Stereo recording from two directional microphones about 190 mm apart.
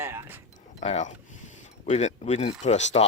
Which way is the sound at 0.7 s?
35° left (ahead or behind).